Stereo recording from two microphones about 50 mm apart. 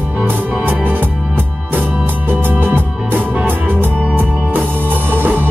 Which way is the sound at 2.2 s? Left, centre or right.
Right.